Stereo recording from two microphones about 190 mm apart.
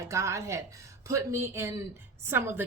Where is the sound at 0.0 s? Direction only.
15° right (ahead or behind).